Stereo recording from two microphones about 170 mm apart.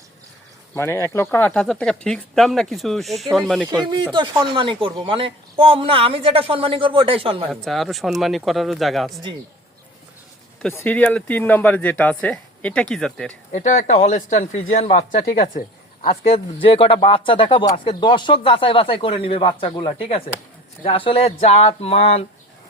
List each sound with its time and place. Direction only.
0.8 s speech: 15° left (ahead or behind)
4.1 s speech: 25° right (ahead or behind)
7.5 s speech: centre (ahead or behind)
10.6 s speech: 10° left (ahead or behind)
13.5 s a man's voice: 45° left (ahead or behind)
16.0 s a man's voice: 35° left (ahead or behind)